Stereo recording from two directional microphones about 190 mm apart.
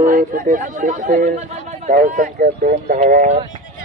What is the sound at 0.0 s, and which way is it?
Speech, 45° right (ahead or behind).